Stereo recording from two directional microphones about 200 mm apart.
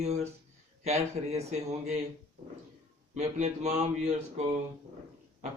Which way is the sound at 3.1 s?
35° right (ahead or behind).